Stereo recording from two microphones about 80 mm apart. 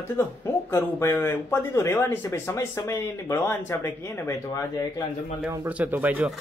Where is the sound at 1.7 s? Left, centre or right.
Left.